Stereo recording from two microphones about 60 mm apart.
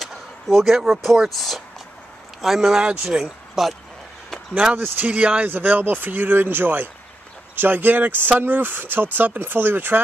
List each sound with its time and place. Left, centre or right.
0.0 s speech: centre
3.6 s speech: centre
4.7 s speech: right